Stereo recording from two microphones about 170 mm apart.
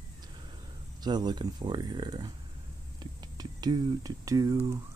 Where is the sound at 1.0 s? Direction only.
25° right (ahead or behind).